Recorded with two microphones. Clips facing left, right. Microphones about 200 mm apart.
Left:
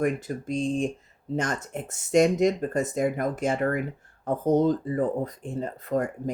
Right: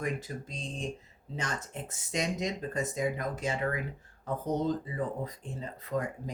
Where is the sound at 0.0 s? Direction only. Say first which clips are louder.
Left 9 dB; 50° left (ahead or behind).